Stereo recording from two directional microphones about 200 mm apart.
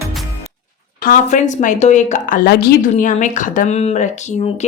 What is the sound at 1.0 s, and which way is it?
A woman's voice, 40° left (ahead or behind).